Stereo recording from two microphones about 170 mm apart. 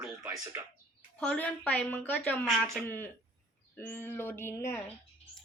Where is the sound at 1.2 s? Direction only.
10° left (ahead or behind).